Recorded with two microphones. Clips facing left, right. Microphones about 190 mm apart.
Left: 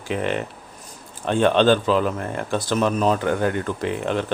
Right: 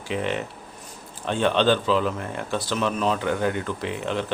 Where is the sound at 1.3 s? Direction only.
50° left (ahead or behind).